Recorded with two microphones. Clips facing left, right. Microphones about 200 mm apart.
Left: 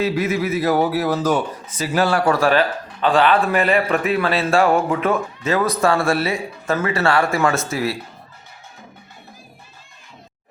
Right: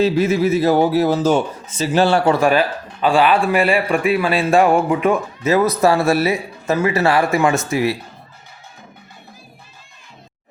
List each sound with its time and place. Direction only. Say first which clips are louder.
0.0 s a man's voice: right 5 dB; 30° right (ahead or behind)
2.5 s a man's voice: right 1 dB; 10° right (ahead or behind)